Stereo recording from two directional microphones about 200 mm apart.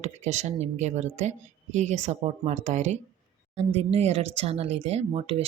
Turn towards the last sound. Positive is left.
turn(degrees=-30)  # may be behind; listen again after turning